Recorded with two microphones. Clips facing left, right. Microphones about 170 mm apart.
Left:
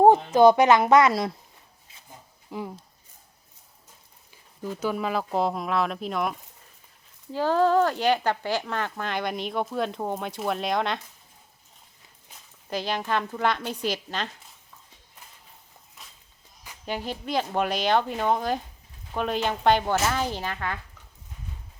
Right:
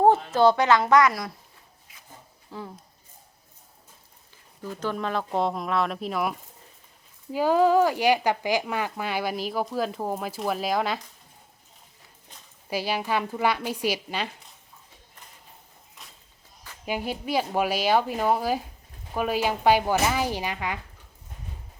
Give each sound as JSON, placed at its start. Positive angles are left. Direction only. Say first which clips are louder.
{"t": 0.0, "sound": "a woman's voice", "louder": "left 3 dB", "side_deg": 15}
{"t": 2.5, "sound": "speech", "louder": "left 4 dB", "side_deg": 15}
{"t": 4.6, "sound": "speech", "louder": "left 2 dB", "side_deg": 10}
{"t": 7.3, "sound": "speech", "louder": "right 1 dB", "side_deg": -10}
{"t": 12.7, "sound": "speech", "louder": "right 1 dB", "side_deg": -10}
{"t": 16.8, "sound": "speech", "louder": "right 2 dB", "side_deg": -10}